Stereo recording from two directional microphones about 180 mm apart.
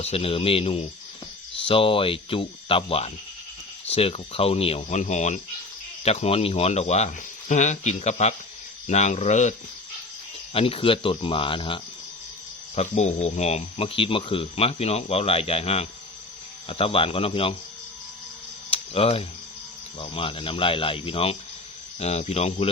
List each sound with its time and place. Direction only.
0.0 s speech: 35° left (ahead or behind)
12.7 s speech: 40° left (ahead or behind)
18.7 s a sound: 35° left (ahead or behind)
20.0 s speech: 30° left (ahead or behind)